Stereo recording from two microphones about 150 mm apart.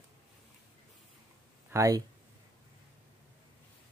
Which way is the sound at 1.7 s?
20° right (ahead or behind).